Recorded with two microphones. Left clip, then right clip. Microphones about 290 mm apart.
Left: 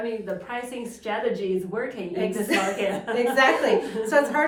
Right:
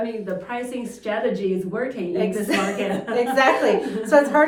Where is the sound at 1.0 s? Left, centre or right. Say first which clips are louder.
Right 3 dB; centre.